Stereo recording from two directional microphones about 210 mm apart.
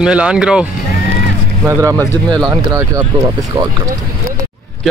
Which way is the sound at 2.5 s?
20° right (ahead or behind).